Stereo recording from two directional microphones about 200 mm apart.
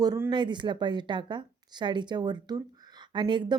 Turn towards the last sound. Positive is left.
turn(degrees=-20)  # may be behind; listen again after turning